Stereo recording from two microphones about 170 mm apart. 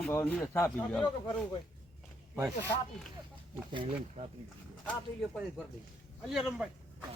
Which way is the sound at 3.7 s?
30° right (ahead or behind).